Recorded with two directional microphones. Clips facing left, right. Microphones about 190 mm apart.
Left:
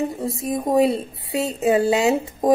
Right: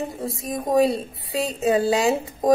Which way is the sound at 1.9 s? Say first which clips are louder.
Left 2 dB; 20° left (ahead or behind).